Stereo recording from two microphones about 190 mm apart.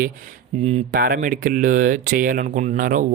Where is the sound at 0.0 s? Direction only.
40° right (ahead or behind).